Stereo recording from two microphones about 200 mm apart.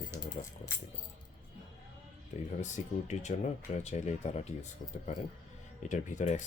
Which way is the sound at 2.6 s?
35° left (ahead or behind).